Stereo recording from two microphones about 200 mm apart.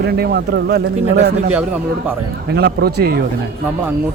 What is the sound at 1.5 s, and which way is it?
Speech, 5° right (ahead or behind).